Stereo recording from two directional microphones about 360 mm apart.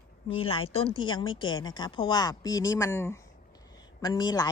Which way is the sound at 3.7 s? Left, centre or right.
Centre.